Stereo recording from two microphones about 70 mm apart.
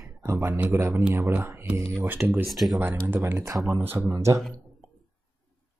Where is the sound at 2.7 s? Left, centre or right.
Right.